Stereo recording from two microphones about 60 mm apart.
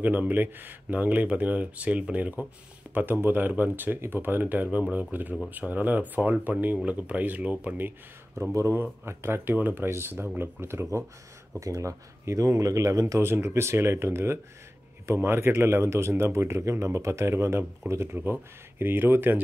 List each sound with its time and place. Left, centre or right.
0.0 s speech: right
8.4 s speech: right
11.6 s speech: right
13.2 s speech: right